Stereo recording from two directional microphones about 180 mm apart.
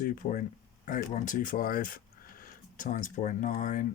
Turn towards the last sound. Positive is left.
turn(degrees=45)  # may be behind; listen again after turning